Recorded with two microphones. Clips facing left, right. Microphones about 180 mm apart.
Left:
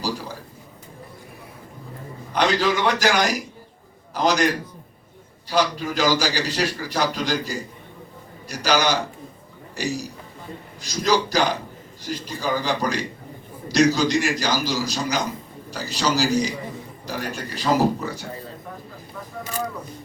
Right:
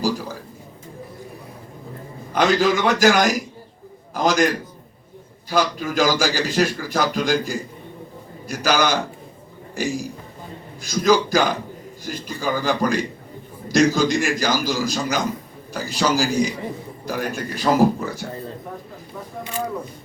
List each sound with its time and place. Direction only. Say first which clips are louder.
2.3 s a man's voice: right 3 dB; 50° right (ahead or behind)
5.5 s a man's voice: right 1 dB; 50° right (ahead or behind)